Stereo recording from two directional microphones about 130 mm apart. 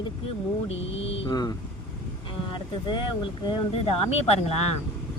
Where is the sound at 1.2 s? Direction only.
30° left (ahead or behind).